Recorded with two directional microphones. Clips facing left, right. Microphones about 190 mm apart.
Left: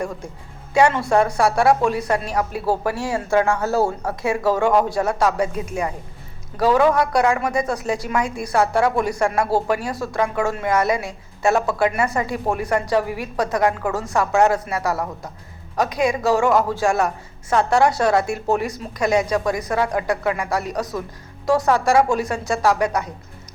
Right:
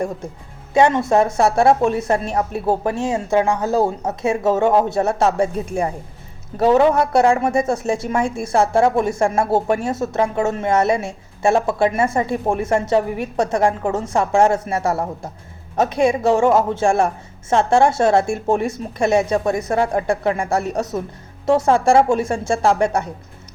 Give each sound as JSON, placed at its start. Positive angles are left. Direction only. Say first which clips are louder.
{"t": 0.7, "sound": "a woman's voice", "louder": "right 2 dB", "side_deg": -20}